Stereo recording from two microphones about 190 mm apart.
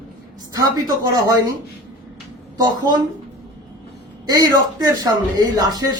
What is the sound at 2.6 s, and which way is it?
Speech, 20° right (ahead or behind).